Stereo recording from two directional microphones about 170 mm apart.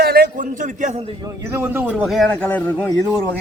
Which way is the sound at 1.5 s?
15° right (ahead or behind).